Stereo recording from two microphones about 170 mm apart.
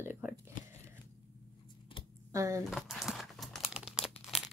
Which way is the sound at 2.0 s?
30° left (ahead or behind).